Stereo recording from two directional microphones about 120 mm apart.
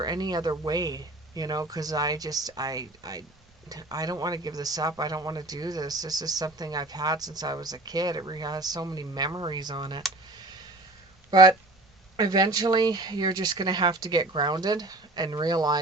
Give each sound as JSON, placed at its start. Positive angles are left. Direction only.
{"t": 0.0, "sound": "speech", "side_deg": -35}
{"t": 10.3, "sound": "clicking", "side_deg": -35}
{"t": 11.3, "sound": "speech", "side_deg": -35}